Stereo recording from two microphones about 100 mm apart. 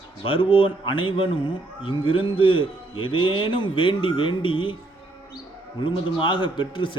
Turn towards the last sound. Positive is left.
turn(degrees=55)  # may be behind; listen again after turning